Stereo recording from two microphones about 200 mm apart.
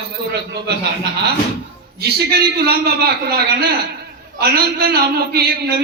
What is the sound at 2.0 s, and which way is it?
A man's voice, 55° right (ahead or behind).